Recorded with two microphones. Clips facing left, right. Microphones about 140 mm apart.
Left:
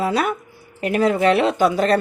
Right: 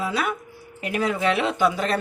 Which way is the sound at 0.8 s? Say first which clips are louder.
Left 6 dB; 40° left (ahead or behind).